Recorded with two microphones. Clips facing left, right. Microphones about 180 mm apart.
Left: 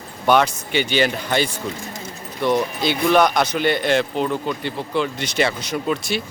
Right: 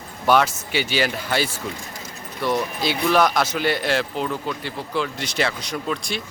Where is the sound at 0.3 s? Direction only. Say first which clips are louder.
Left 2 dB; centre (ahead or behind).